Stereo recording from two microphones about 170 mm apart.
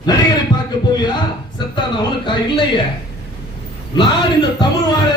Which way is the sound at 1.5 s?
25° left (ahead or behind).